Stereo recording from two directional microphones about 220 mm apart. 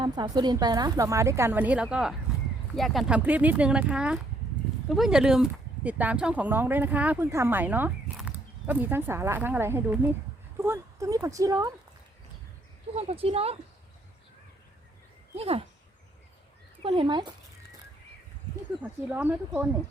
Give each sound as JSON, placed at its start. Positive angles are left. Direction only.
{"t": 0.0, "sound": "speech", "side_deg": -20}
{"t": 13.0, "sound": "speech", "side_deg": -25}
{"t": 15.4, "sound": "speech", "side_deg": -25}
{"t": 16.8, "sound": "speech", "side_deg": -25}
{"t": 18.8, "sound": "speech", "side_deg": -5}